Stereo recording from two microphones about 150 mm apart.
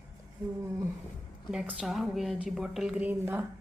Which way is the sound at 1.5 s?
5° right (ahead or behind).